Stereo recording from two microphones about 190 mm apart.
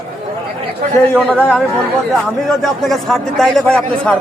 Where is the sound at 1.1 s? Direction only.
5° left (ahead or behind).